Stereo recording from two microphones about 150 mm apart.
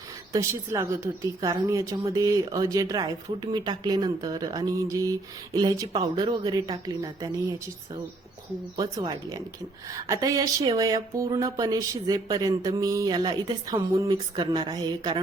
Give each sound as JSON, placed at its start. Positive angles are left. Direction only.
{"t": 0.3, "sound": "a woman's voice", "side_deg": -15}
{"t": 8.7, "sound": "speech", "side_deg": -25}